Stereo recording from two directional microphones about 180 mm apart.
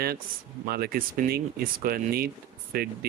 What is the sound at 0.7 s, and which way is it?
Speech, 55° right (ahead or behind).